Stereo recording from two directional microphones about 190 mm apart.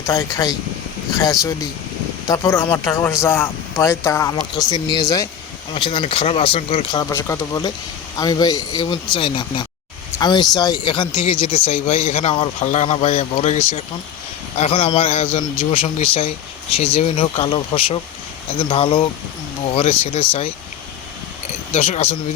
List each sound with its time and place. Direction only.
0.1 s speech: 15° left (ahead or behind); by 6.8 s 30° left (ahead or behind)
6.9 s a man's voice: 15° left (ahead or behind); by 15.6 s 35° left (ahead or behind)
15.7 s speech: 45° left (ahead or behind)
16.1 s speech: 30° left (ahead or behind)
21.7 s a man's voice: 35° left (ahead or behind)